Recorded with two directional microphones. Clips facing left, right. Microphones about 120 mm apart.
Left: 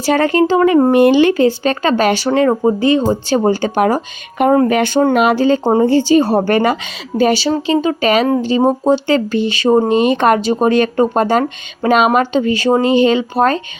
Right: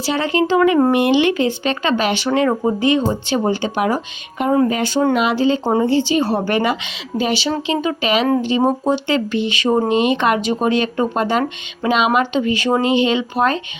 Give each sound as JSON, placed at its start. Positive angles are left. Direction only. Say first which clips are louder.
{"t": 0.0, "sound": "speech", "louder": "left 5 dB", "side_deg": 50}
{"t": 4.4, "sound": "speech", "louder": "left 5 dB", "side_deg": 55}
{"t": 5.1, "sound": "speech", "louder": "left 4 dB", "side_deg": 50}